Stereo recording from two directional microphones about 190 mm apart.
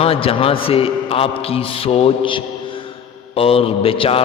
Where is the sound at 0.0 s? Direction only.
30° left (ahead or behind).